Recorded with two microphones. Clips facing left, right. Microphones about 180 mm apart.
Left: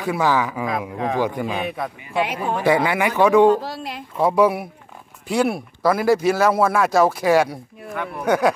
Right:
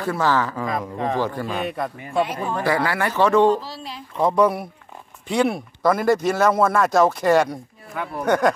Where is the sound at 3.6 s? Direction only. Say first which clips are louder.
Left 4 dB; 60° left (ahead or behind).